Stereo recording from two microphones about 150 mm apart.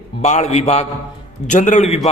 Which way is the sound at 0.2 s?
50° left (ahead or behind).